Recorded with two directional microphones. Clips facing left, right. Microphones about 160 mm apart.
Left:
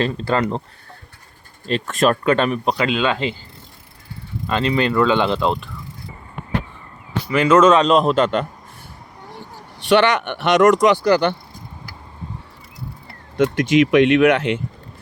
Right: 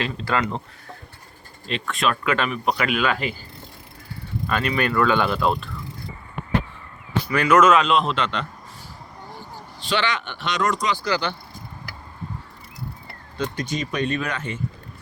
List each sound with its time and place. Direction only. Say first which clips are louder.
0.0 s speech: left 5 dB; 35° left (ahead or behind)
1.6 s speech: left 7 dB; 40° left (ahead or behind); by 3.3 s 25° left (ahead or behind)
4.4 s speech: left 4 dB; 25° left (ahead or behind)
7.3 s speech: left 4 dB; 25° left (ahead or behind); by 8.4 s 45° left (ahead or behind)
9.9 s speech: left 9 dB; 65° left (ahead or behind)
13.3 s speech: left 12 dB; 85° left